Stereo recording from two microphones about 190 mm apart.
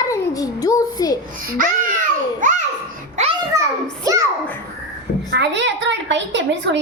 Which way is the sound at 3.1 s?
35° right (ahead or behind).